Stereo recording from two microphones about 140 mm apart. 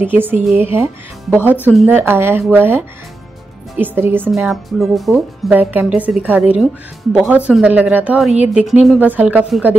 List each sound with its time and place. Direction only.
0.0 s a woman's voice: 15° right (ahead or behind)
1.9 s a woman's voice: 15° right (ahead or behind)
4.3 s speech: centre (ahead or behind)
5.5 s a woman's voice: 10° right (ahead or behind)